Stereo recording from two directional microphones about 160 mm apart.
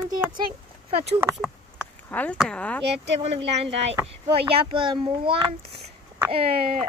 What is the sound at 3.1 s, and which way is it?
A child's voice, 40° right (ahead or behind).